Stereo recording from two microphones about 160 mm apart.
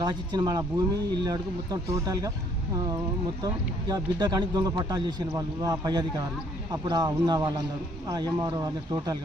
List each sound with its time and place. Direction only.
0.0 s a man's voice: 25° right (ahead or behind)
3.4 s a man's voice: 25° right (ahead or behind)